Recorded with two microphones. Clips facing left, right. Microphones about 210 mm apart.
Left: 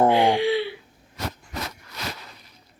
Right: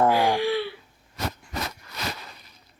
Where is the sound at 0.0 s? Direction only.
20° left (ahead or behind).